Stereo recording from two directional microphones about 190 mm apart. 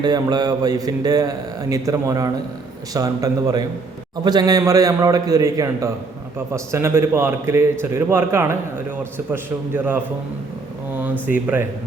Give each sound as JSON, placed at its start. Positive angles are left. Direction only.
{"t": 0.0, "sound": "a man's voice", "side_deg": -20}